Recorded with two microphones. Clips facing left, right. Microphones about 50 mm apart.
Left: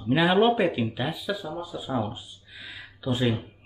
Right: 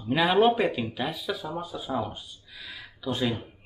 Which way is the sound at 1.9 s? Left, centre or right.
Centre.